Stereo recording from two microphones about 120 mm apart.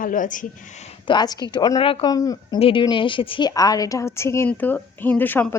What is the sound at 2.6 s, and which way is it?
Speech, 45° left (ahead or behind).